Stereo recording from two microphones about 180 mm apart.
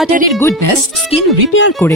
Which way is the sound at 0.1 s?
50° right (ahead or behind).